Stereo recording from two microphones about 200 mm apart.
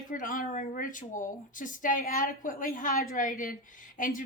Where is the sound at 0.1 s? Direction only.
40° left (ahead or behind).